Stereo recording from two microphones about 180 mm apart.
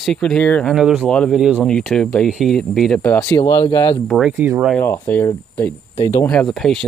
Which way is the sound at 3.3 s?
25° left (ahead or behind).